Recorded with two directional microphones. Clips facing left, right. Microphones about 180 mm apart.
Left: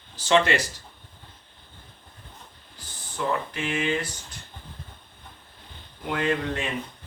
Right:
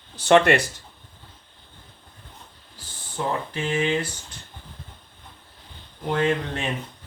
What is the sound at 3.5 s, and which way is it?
Speech, 30° right (ahead or behind).